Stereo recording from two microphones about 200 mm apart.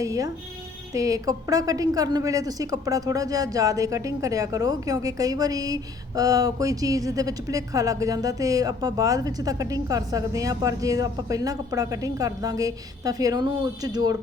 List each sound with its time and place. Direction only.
0.0 s a woman's voice: 15° right (ahead or behind)